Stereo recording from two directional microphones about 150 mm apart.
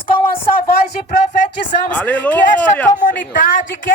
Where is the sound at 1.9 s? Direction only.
10° left (ahead or behind).